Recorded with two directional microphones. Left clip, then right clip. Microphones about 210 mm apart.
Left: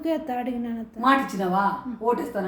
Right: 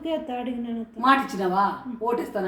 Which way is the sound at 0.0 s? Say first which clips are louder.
Left 2 dB; 30° left (ahead or behind).